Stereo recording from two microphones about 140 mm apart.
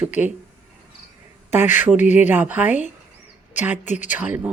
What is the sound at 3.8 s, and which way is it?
Speech, 60° left (ahead or behind).